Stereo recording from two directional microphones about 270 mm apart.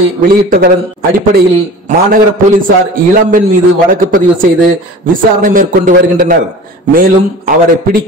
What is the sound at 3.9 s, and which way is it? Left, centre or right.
A man's voice, right.